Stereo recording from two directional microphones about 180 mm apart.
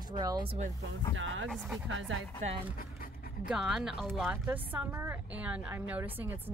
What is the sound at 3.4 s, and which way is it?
A woman's voice, 5° right (ahead or behind).